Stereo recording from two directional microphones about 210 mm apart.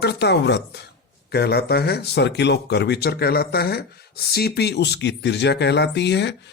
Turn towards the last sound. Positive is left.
turn(degrees=55)  # may be behind; listen again after turning